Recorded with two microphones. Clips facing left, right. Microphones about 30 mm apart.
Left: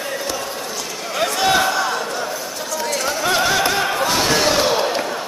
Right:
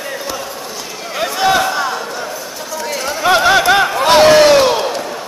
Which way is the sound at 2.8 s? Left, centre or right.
Centre.